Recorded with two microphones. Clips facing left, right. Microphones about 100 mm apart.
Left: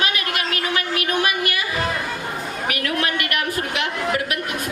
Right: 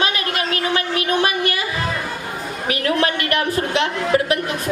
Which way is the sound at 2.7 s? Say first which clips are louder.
Right 5 dB; 30° right (ahead or behind).